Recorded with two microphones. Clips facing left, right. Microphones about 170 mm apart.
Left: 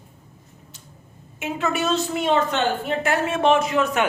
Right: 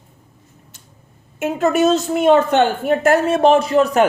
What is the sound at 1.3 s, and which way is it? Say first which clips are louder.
A woman's voice: right 8 dB; 45° right (ahead or behind).